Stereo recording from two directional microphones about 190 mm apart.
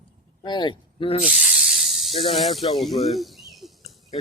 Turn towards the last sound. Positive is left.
turn(degrees=0)  # may be behind; listen again after turning